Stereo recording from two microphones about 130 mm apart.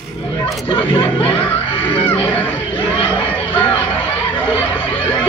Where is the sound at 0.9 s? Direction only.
45° left (ahead or behind).